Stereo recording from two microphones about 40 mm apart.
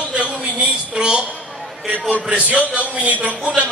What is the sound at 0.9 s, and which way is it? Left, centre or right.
Speech, right.